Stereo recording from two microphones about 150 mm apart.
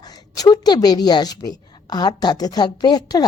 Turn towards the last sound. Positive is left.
turn(degrees=25)  # may be behind; listen again after turning